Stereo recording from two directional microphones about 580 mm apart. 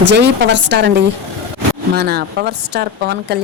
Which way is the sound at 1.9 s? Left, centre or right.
Centre.